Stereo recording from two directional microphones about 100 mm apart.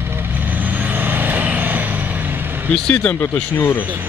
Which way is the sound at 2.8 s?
10° left (ahead or behind).